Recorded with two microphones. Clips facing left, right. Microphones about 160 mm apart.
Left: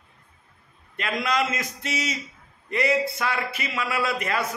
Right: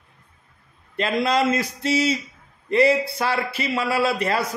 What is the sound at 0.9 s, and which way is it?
A man's voice, 30° right (ahead or behind).